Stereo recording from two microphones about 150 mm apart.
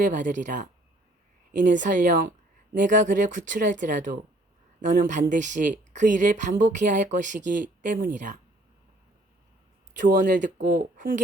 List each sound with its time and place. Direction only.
0.0 s speech: 60° right (ahead or behind)
10.0 s speech: 60° right (ahead or behind)